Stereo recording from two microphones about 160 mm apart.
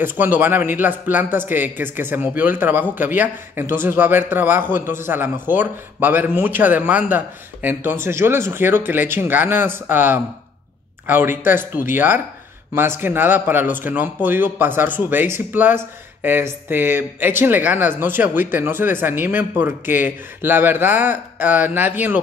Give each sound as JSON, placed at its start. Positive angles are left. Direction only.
{"t": 0.0, "sound": "speech", "side_deg": -15}